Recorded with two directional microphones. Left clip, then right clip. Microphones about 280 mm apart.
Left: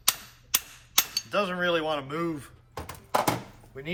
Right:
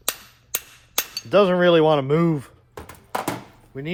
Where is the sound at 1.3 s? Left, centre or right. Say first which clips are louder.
Right 11 dB; right.